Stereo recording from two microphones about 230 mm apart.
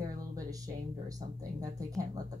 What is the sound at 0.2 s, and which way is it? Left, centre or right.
Speech, centre.